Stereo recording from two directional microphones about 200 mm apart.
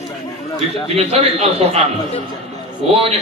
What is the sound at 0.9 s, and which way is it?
Speech, 30° right (ahead or behind).